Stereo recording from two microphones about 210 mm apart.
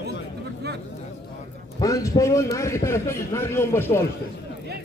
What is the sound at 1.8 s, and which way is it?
A man's voice, 15° left (ahead or behind).